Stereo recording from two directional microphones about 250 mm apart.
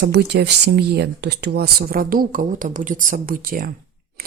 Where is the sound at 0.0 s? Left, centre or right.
Right.